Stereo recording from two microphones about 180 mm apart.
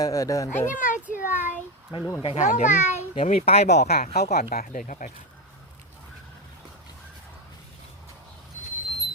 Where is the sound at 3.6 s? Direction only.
65° left (ahead or behind); by 5.1 s 45° left (ahead or behind).